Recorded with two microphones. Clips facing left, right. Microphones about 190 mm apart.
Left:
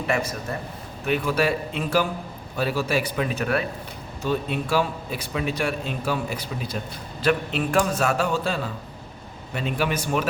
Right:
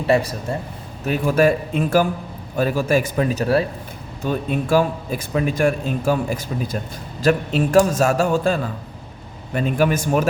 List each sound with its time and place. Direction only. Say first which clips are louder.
0.1 s a man's voice: right 8 dB; 35° right (ahead or behind)
4.2 s a man's voice: right 3 dB; 45° right (ahead or behind)